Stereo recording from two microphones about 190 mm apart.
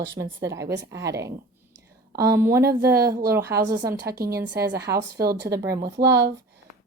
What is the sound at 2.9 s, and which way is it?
Speech, 55° right (ahead or behind).